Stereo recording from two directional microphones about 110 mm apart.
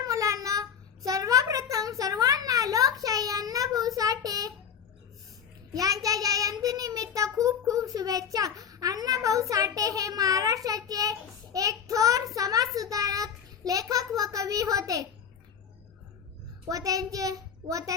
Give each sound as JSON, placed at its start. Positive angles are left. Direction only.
{"t": 0.0, "sound": "child singing", "side_deg": -30}
{"t": 1.7, "sound": "a sound", "side_deg": -30}
{"t": 5.7, "sound": "child singing", "side_deg": -35}
{"t": 16.6, "sound": "a child's voice", "side_deg": -35}